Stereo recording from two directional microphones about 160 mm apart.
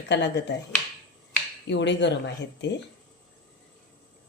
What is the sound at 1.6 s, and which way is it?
Speech, 90° left.